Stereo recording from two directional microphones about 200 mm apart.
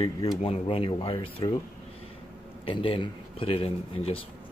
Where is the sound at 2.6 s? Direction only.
25° left (ahead or behind).